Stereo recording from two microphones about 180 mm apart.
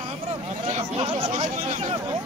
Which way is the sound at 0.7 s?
35° right (ahead or behind).